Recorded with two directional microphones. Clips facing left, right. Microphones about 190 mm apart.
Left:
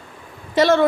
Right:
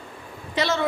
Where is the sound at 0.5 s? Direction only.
50° left (ahead or behind).